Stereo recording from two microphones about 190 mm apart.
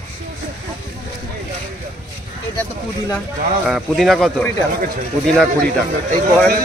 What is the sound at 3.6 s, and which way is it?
Speech, centre (ahead or behind).